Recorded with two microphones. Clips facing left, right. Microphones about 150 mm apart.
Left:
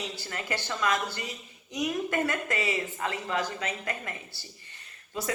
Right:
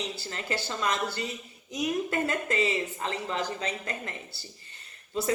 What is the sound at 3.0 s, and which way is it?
A woman's voice, 30° right (ahead or behind).